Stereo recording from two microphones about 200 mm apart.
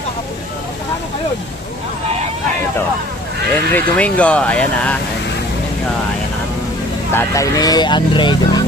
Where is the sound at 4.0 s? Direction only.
5° left (ahead or behind).